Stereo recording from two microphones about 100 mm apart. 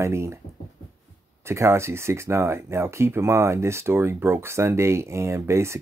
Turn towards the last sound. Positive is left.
turn(degrees=-25)  # may be behind; listen again after turning